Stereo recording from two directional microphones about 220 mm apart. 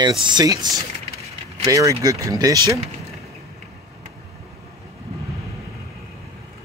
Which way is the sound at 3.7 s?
30° right (ahead or behind).